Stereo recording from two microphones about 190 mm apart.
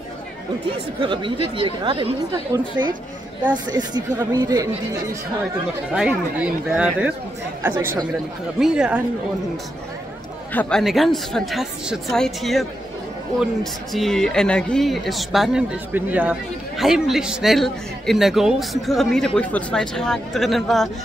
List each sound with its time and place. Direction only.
1.0 s speech: 25° right (ahead or behind)
5.9 s speech: 5° right (ahead or behind)
8.5 s speech: 5° right (ahead or behind)
10.5 s speech: 5° left (ahead or behind)
13.9 s speech: centre (ahead or behind)